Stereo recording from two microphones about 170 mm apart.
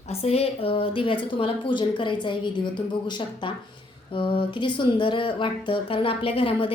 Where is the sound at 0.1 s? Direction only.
35° left (ahead or behind).